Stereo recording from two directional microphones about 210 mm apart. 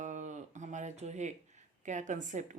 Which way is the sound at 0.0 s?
35° right (ahead or behind).